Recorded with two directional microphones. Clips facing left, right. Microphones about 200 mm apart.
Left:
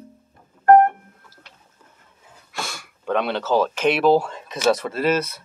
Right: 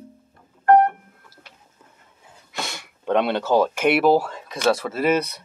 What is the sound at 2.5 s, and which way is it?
Speech, 20° right (ahead or behind).